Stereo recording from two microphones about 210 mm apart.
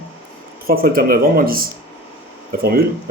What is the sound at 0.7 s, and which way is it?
Speech, 45° right (ahead or behind).